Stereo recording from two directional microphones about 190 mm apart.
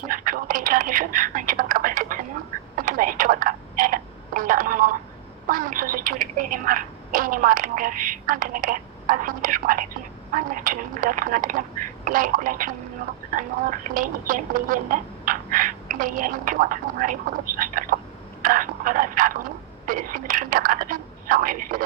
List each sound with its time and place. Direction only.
0.1 s speech: 45° right (ahead or behind)
2.7 s telephone: 45° right (ahead or behind)
5.5 s a woman's voice: 45° right (ahead or behind)
18.4 s telephone: 45° right (ahead or behind)